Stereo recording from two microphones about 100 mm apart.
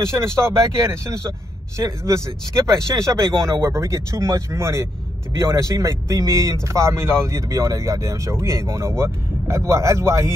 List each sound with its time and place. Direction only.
0.4 s speech: 25° right (ahead or behind)